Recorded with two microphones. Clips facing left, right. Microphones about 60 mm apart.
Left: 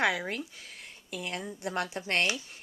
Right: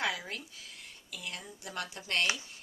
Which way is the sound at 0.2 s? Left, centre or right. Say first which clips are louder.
Left 7 dB; left.